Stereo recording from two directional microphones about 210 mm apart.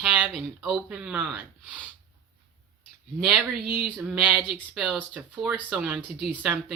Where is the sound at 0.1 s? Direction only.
Centre (ahead or behind).